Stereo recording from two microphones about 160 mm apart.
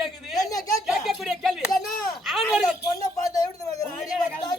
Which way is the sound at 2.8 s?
20° left (ahead or behind).